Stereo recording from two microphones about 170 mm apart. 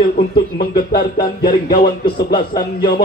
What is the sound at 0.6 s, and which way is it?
Speech, 60° left (ahead or behind).